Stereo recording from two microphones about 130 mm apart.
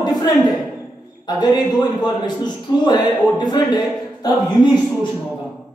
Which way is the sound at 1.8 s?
35° left (ahead or behind).